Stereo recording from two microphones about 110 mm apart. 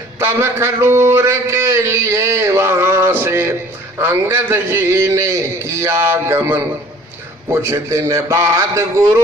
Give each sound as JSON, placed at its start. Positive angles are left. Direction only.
{"t": 0.2, "sound": "a man's voice", "side_deg": -20}